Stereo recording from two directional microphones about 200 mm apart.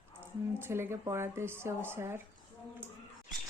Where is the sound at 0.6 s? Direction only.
10° right (ahead or behind).